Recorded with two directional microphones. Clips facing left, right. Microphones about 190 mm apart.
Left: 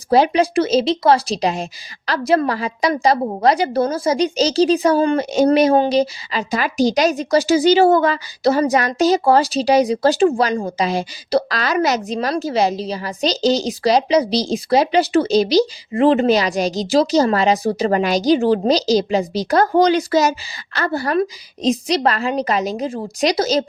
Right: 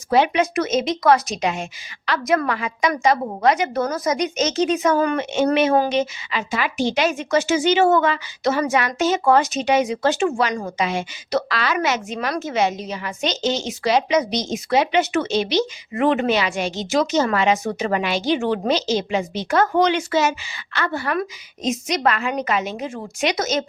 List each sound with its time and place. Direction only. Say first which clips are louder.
0.1 s a woman's voice: left 3 dB; 35° left (ahead or behind)